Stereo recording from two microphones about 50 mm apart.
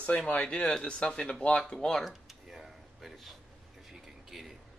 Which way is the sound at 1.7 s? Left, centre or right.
Centre.